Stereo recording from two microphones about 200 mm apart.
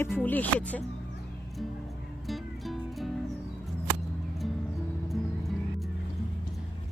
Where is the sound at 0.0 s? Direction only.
10° left (ahead or behind).